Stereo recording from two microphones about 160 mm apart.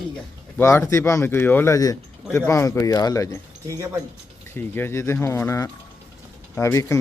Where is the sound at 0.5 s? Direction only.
20° left (ahead or behind).